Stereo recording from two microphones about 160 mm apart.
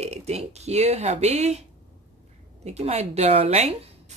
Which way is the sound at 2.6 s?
40° right (ahead or behind).